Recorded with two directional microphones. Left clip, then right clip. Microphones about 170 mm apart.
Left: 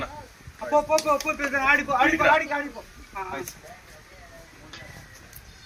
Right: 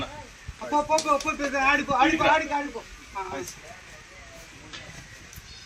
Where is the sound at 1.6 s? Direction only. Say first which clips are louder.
Left 1 dB; 60° left (ahead or behind).